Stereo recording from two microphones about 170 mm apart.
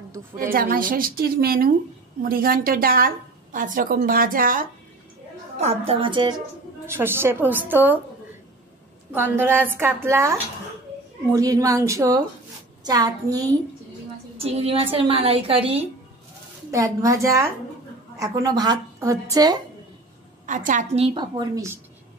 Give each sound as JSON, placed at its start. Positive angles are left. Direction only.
{"t": 0.4, "sound": "a woman's voice", "side_deg": -55}
{"t": 5.6, "sound": "a woman's voice", "side_deg": -35}
{"t": 6.9, "sound": "a woman's voice", "side_deg": -15}
{"t": 9.1, "sound": "a woman's voice", "side_deg": -15}
{"t": 14.3, "sound": "a woman's voice", "side_deg": -35}
{"t": 16.7, "sound": "a woman's voice", "side_deg": -20}
{"t": 20.4, "sound": "a woman's voice", "side_deg": -50}
{"t": 21.0, "sound": "a woman's voice", "side_deg": -30}